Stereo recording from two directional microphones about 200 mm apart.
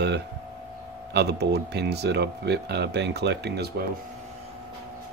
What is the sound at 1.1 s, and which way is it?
Speech, 55° right (ahead or behind).